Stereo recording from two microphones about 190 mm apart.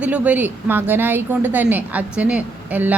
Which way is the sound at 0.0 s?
5° right (ahead or behind).